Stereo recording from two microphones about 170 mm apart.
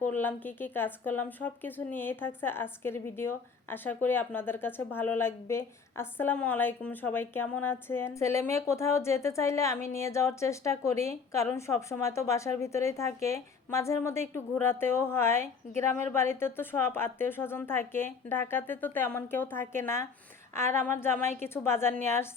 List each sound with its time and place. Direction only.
0.0 s speech: 10° left (ahead or behind)